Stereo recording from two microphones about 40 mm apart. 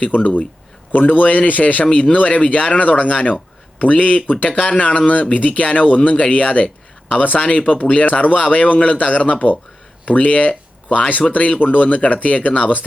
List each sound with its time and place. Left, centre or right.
0.0 s speech: left
7.3 s speech: left